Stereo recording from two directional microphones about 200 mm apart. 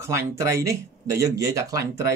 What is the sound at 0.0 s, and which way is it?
Speech, 15° right (ahead or behind).